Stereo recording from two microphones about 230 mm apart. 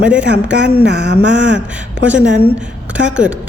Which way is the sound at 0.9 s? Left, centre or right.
Right.